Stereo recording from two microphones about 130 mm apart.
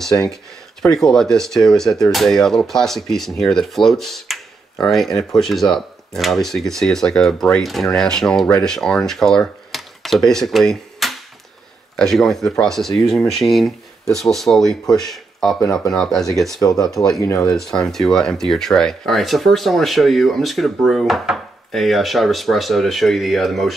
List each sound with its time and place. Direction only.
0.8 s speech: 5° left (ahead or behind)
17.2 s speech: 20° left (ahead or behind)
17.5 s speech: 5° left (ahead or behind)